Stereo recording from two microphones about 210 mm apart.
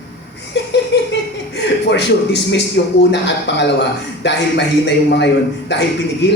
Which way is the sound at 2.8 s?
55° left (ahead or behind).